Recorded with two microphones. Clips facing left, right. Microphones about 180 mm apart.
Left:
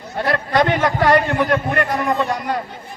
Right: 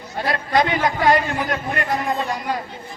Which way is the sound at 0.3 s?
65° left (ahead or behind).